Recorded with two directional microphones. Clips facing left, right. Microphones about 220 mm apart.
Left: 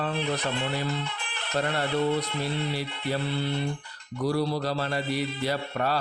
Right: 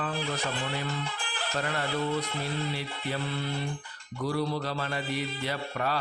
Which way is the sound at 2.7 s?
35° left (ahead or behind).